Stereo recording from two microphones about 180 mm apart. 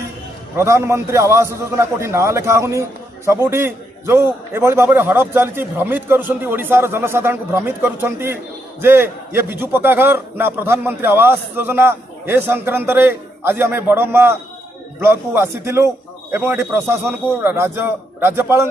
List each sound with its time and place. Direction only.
0.5 s a man's voice: 15° right (ahead or behind)